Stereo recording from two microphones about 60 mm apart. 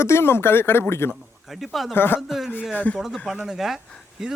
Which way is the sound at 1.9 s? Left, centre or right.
Left.